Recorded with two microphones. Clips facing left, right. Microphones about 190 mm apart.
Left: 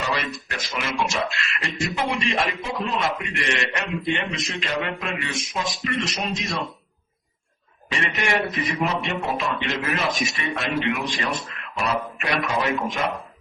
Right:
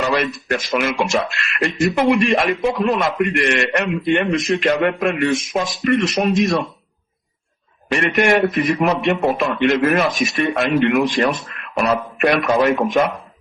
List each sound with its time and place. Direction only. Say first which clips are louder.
0.0 s a sound: right 8 dB; 60° right (ahead or behind)
0.4 s a man's voice: right 10 dB; 55° right (ahead or behind)
7.9 s a man's voice: right 9 dB; 55° right (ahead or behind)